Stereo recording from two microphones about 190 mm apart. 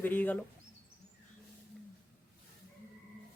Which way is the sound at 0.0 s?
10° left (ahead or behind).